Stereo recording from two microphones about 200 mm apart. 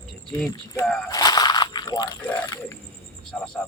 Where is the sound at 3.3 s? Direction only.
5° left (ahead or behind).